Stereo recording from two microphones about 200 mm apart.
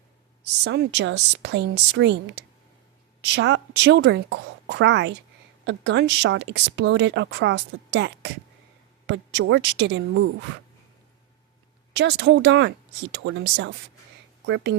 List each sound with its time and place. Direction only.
0.6 s a woman's voice: 60° right (ahead or behind)
11.9 s speech: 60° right (ahead or behind)